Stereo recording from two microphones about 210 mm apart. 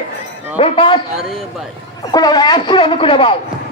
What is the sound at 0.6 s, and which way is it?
Speech, 25° left (ahead or behind).